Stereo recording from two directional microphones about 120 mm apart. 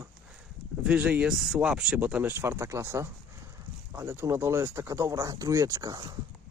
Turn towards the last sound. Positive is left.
turn(degrees=-30)  # may be behind; listen again after turning